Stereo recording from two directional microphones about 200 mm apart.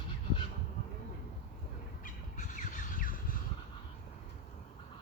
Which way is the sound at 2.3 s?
40° left (ahead or behind).